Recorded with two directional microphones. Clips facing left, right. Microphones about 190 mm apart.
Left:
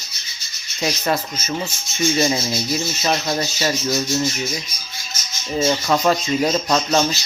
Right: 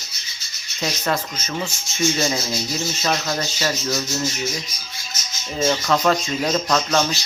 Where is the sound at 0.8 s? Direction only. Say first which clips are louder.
Left 2 dB; 10° left (ahead or behind).